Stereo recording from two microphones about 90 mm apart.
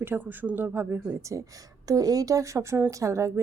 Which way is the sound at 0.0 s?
20° right (ahead or behind).